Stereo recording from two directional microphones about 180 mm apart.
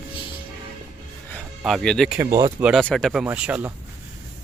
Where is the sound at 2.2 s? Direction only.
20° right (ahead or behind).